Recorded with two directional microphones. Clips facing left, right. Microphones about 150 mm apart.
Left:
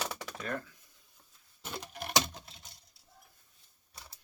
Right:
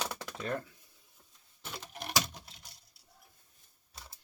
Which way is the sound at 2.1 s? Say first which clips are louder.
Left 3 dB; 25° left (ahead or behind).